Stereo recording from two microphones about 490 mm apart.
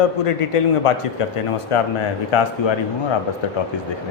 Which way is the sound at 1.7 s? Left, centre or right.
Left.